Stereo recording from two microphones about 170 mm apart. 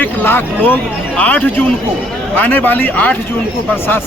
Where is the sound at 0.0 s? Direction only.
10° left (ahead or behind).